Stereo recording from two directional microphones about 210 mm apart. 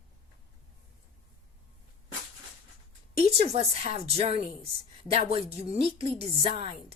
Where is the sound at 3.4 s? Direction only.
30° right (ahead or behind).